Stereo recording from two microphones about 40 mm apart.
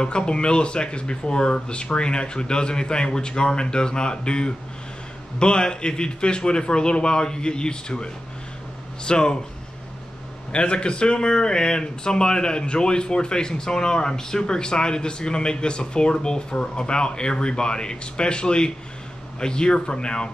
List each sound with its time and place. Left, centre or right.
0.0 s speech: left
10.5 s speech: left